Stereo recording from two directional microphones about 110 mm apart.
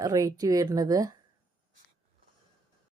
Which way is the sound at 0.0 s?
30° right (ahead or behind).